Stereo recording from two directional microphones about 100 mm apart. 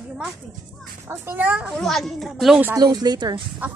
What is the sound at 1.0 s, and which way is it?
Speech, 25° right (ahead or behind).